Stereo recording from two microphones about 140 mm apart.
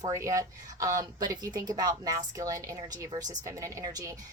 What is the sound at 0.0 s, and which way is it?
Speech, 20° right (ahead or behind).